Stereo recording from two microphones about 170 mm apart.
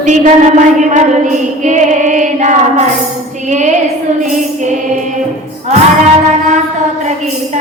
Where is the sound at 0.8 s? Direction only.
45° right (ahead or behind).